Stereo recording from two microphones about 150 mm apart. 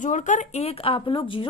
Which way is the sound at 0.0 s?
55° left (ahead or behind).